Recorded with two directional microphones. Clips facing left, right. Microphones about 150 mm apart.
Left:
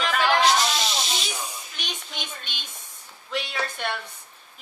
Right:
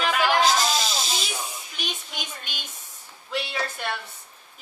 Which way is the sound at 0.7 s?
40° right (ahead or behind).